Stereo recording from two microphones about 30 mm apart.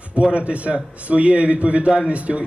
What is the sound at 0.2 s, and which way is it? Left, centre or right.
A man's voice, right.